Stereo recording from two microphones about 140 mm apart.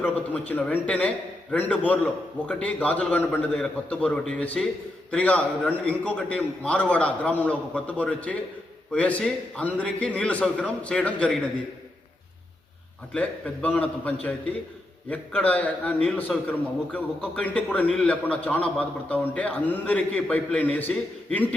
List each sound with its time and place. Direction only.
0.0 s a man's voice: 10° left (ahead or behind)
13.1 s a man's voice: 10° left (ahead or behind)